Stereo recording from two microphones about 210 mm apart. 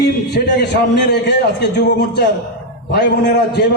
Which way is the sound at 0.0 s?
55° left (ahead or behind).